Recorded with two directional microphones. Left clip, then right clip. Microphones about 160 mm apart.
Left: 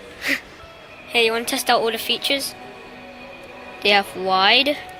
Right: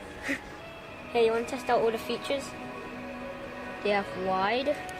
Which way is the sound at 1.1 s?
25° left (ahead or behind).